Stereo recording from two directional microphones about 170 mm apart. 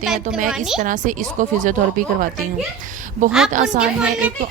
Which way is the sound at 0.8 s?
50° right (ahead or behind).